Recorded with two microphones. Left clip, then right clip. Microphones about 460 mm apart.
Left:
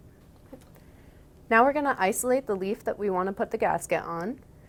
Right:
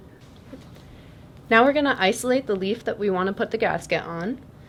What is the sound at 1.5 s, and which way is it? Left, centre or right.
A woman's voice, left.